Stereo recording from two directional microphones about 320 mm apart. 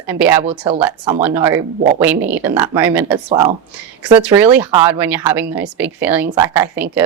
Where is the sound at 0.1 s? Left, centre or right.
Centre.